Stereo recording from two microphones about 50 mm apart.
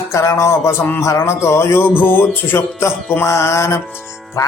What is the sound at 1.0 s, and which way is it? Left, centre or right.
Speech, left.